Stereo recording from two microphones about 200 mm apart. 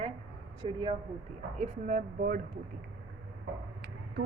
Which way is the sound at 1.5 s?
40° right (ahead or behind).